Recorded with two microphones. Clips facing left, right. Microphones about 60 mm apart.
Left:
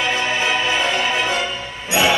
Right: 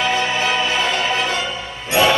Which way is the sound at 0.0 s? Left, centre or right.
Centre.